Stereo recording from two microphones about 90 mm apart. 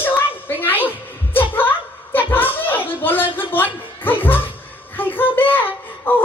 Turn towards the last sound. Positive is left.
turn(degrees=20)  # may be behind; listen again after turning